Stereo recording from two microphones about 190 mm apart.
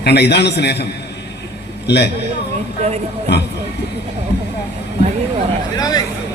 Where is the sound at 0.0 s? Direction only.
60° left (ahead or behind).